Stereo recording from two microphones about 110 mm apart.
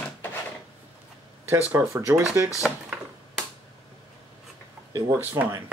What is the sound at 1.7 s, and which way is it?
Speech, 25° right (ahead or behind).